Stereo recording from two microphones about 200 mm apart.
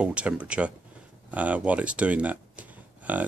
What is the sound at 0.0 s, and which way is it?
Speech, 5° right (ahead or behind).